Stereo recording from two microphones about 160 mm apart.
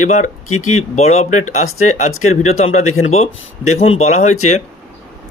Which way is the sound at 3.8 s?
40° left (ahead or behind).